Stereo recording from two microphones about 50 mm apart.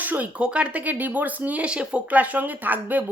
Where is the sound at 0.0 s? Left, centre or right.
Right.